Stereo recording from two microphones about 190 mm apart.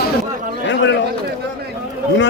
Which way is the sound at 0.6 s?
75° left (ahead or behind).